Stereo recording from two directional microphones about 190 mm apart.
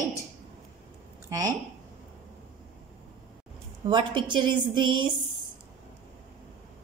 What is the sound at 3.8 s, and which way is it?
A woman's voice, 25° right (ahead or behind).